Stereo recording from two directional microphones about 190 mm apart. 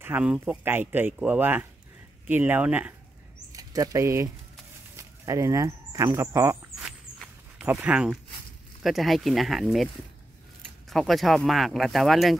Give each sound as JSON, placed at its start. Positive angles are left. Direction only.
{"t": 0.0, "sound": "speech", "side_deg": -10}
{"t": 3.5, "sound": "speech", "side_deg": -20}
{"t": 4.9, "sound": "bird", "side_deg": -15}
{"t": 7.2, "sound": "a sound", "side_deg": -5}
{"t": 8.8, "sound": "speech", "side_deg": 0}
{"t": 10.9, "sound": "speech", "side_deg": 0}